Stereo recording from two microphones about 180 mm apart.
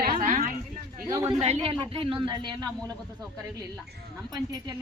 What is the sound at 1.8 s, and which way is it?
Speech, 30° right (ahead or behind).